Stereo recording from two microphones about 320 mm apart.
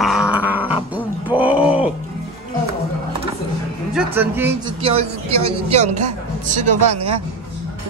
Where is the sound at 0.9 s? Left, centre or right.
Centre.